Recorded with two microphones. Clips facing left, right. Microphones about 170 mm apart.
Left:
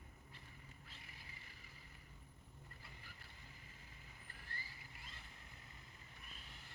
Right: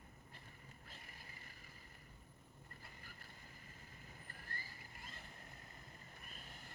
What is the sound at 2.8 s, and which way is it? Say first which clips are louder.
Vehicle: right 1 dB; 45° right (ahead or behind).